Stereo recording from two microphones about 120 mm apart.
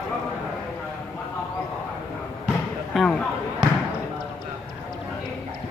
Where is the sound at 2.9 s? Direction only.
5° left (ahead or behind).